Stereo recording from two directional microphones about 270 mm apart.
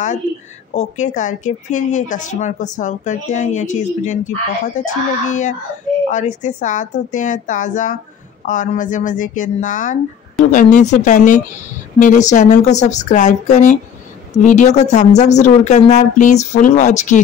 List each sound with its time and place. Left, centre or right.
0.7 s speech: left